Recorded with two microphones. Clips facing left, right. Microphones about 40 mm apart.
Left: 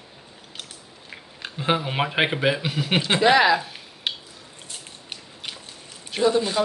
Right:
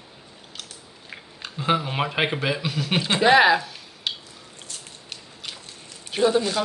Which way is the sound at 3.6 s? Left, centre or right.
Left.